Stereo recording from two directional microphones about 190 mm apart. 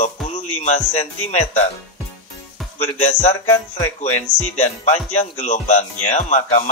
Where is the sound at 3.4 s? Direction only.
20° left (ahead or behind).